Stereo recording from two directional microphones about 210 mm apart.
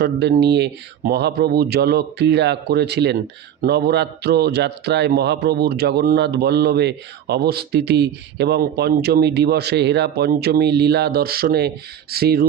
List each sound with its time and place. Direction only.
0.0 s a man's voice: 50° right (ahead or behind)